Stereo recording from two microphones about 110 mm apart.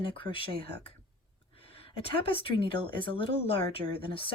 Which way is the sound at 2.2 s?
55° left (ahead or behind).